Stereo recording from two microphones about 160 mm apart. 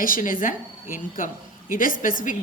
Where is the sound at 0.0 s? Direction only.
60° left (ahead or behind).